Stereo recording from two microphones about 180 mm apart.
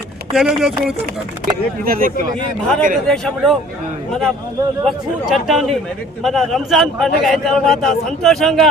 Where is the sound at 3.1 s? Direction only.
Centre (ahead or behind).